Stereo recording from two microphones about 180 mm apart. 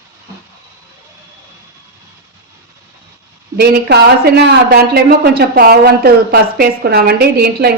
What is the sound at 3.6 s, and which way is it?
Speech, 65° right (ahead or behind).